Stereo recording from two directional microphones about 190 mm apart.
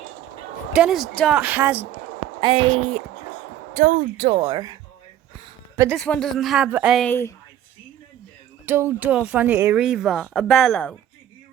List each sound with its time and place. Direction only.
0.7 s speech: 5° right (ahead or behind)
1.4 s a woman's voice: 10° right (ahead or behind)
2.2 s a woman's voice: 25° right (ahead or behind)
3.8 s speech: 45° right (ahead or behind)
4.5 s speech: 20° right (ahead or behind)
6.0 s a woman's voice: 5° left (ahead or behind)
7.0 s speech: 10° left (ahead or behind)
8.6 s speech: 10° right (ahead or behind); by 10.9 s 5° left (ahead or behind)